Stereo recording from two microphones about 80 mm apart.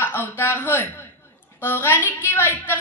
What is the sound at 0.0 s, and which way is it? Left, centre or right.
A woman's voice, left.